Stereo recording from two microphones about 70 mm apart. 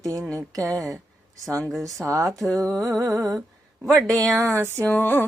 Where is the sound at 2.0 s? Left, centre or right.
Right.